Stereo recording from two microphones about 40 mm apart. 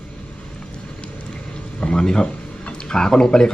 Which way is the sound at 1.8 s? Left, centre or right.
Centre.